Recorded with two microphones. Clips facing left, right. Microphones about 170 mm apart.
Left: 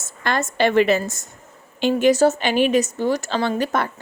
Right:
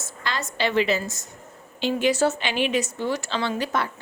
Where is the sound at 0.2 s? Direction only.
55° left (ahead or behind).